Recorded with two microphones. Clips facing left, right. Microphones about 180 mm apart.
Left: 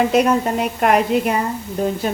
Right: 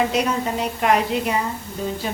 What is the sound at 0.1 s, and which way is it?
A woman's voice, 55° left (ahead or behind).